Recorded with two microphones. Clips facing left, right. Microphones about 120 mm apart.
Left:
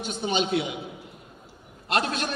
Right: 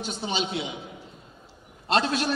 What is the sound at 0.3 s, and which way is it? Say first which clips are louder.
Speech: left 5 dB; 55° left (ahead or behind).